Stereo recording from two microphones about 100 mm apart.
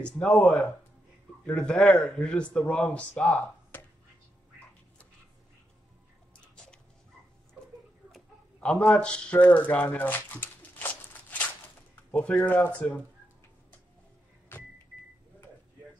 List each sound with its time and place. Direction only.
0.1 s speech: 10° left (ahead or behind)
8.5 s speech: 10° left (ahead or behind)